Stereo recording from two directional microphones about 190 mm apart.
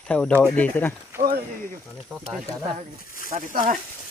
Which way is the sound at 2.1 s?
5° right (ahead or behind).